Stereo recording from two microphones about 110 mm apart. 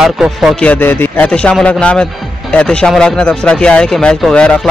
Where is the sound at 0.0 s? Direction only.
5° right (ahead or behind).